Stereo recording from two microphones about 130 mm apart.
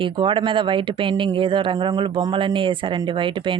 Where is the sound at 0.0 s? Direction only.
40° right (ahead or behind).